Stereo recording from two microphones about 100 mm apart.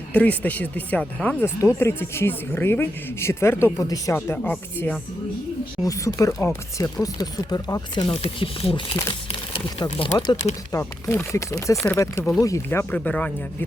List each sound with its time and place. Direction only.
0.1 s speech: 15° left (ahead or behind)
1.5 s speech: 25° left (ahead or behind)
3.8 s speech: 35° left (ahead or behind)
4.1 s speech: 20° left (ahead or behind)
5.8 s speech: 35° left (ahead or behind)
8.2 s speech: 65° left (ahead or behind)
10.1 s speech: 45° left (ahead or behind)
11.1 s speech: 25° left (ahead or behind)
12.9 s speech: 15° left (ahead or behind)